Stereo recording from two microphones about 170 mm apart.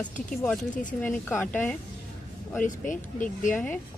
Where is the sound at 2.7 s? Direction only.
50° left (ahead or behind).